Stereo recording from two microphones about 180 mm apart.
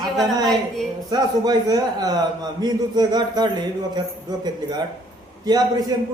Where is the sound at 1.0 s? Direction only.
20° right (ahead or behind).